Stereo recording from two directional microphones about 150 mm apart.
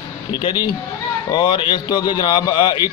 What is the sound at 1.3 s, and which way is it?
Speech, 30° left (ahead or behind).